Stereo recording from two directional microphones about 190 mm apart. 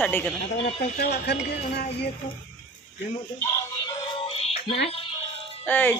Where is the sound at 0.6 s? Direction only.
35° left (ahead or behind).